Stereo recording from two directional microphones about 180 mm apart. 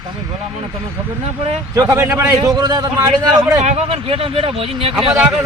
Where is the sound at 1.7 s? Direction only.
15° right (ahead or behind).